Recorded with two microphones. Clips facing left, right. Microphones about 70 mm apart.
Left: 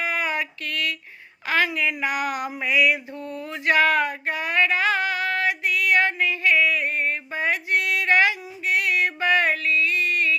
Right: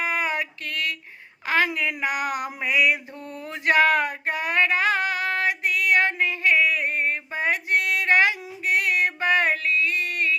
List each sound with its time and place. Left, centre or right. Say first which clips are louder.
0.0 s a sound: even; right
4.3 s female singing: right 2 dB; right
9.0 s music: left 1 dB; right